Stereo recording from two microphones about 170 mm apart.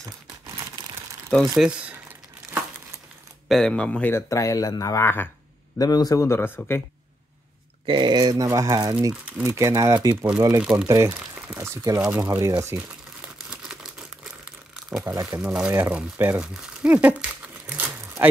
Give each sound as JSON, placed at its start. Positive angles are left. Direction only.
{"t": 1.6, "sound": "speech", "side_deg": -5}
{"t": 3.4, "sound": "a man's voice", "side_deg": 0}
{"t": 7.8, "sound": "speech", "side_deg": -30}
{"t": 9.1, "sound": "speech", "side_deg": -10}
{"t": 10.9, "sound": "speech", "side_deg": -20}
{"t": 11.1, "sound": "speech", "side_deg": -5}
{"t": 13.5, "sound": "a sound", "side_deg": -5}
{"t": 14.4, "sound": "crumpling", "side_deg": -5}
{"t": 15.4, "sound": "speech", "side_deg": -5}
{"t": 15.7, "sound": "crumpling", "side_deg": -10}